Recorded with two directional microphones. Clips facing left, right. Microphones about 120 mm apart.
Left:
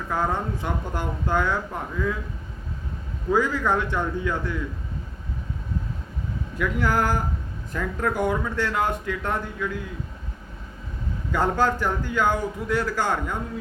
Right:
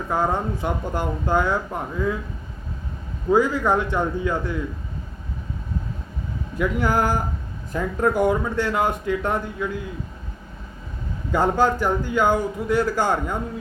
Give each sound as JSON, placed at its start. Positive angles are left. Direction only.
{"t": 0.1, "sound": "speech", "side_deg": -15}
{"t": 3.2, "sound": "speech", "side_deg": -15}
{"t": 6.6, "sound": "speech", "side_deg": -15}
{"t": 11.3, "sound": "speech", "side_deg": -10}